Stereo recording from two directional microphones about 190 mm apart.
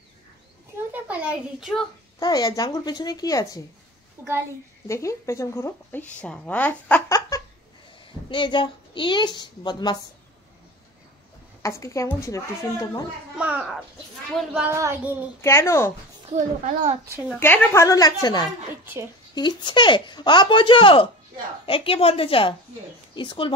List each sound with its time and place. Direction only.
0.9 s a woman's voice: 5° right (ahead or behind)
2.1 s speech: 20° left (ahead or behind)
4.2 s a child's voice: 15° right (ahead or behind)
4.8 s a woman's voice: 15° left (ahead or behind)
11.6 s a woman's voice: 15° left (ahead or behind)
13.4 s speech: 5° right (ahead or behind)
15.4 s a woman's voice: 15° left (ahead or behind)
16.3 s a child's voice: 35° right (ahead or behind)
17.3 s a woman's voice: 10° left (ahead or behind)
18.7 s speech: 10° right (ahead or behind)
19.3 s speech: 25° left (ahead or behind)